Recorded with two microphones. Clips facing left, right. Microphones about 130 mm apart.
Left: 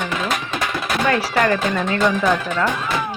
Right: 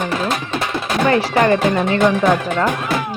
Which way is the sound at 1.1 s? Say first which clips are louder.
Right 4 dB; 25° right (ahead or behind).